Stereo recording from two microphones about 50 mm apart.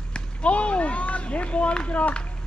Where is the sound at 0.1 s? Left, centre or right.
Left.